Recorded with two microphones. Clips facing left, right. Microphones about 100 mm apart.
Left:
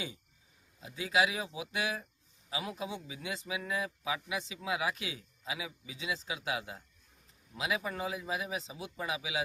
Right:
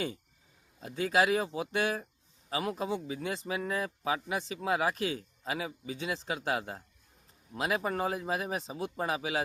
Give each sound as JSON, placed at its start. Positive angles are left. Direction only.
{"t": 0.8, "sound": "speech", "side_deg": -55}